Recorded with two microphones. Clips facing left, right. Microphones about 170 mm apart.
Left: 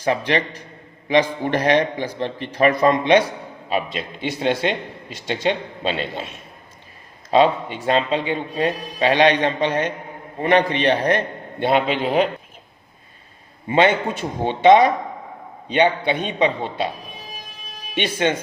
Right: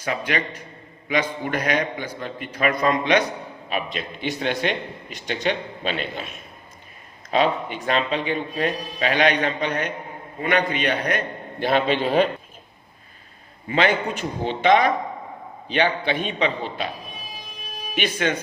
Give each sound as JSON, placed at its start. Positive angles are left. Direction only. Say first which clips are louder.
{"t": 0.0, "sound": "a man's voice", "louder": "left 5 dB", "side_deg": 30}
{"t": 11.6, "sound": "a man's voice", "louder": "left 2 dB", "side_deg": 15}
{"t": 13.7, "sound": "speech", "louder": "left 4 dB", "side_deg": 25}
{"t": 17.9, "sound": "speech", "louder": "left 3 dB", "side_deg": 25}